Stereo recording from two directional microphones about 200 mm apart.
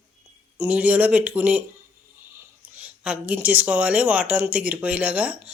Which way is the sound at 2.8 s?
5° right (ahead or behind).